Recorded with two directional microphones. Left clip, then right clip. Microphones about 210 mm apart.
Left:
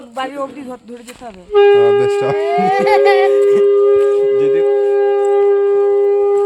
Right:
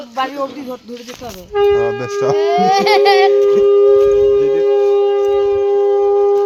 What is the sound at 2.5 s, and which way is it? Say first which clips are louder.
Speech: left 1 dB; 45° right (ahead or behind).